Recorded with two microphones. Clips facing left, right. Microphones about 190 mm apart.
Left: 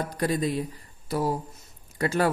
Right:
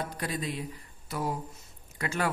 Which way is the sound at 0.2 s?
40° left (ahead or behind).